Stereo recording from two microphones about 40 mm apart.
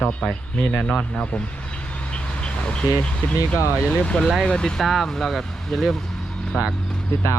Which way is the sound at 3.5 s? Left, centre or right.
Left.